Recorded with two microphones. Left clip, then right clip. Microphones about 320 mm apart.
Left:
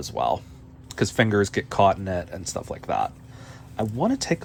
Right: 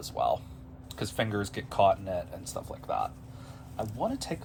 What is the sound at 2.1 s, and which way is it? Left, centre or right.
Speech, left.